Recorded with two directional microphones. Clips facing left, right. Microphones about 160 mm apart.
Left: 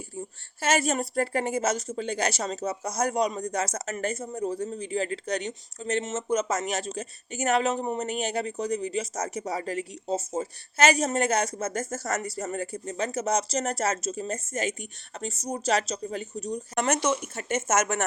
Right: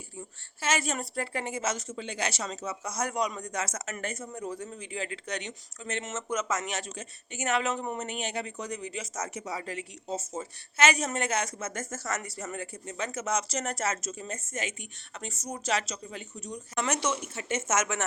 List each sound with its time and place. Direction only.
0.2 s speech: 40° left (ahead or behind)
16.7 s speech: 45° left (ahead or behind)